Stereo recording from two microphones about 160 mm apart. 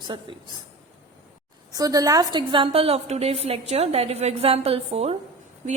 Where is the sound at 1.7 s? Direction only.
25° right (ahead or behind); by 5.2 s 40° right (ahead or behind).